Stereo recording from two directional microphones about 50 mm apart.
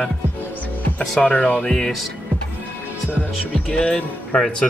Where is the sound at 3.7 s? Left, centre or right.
Left.